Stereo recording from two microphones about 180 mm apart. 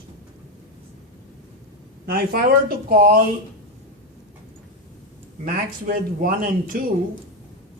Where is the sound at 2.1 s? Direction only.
55° right (ahead or behind).